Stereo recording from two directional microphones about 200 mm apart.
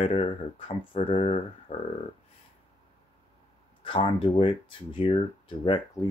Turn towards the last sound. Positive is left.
turn(degrees=25)  # may be behind; listen again after turning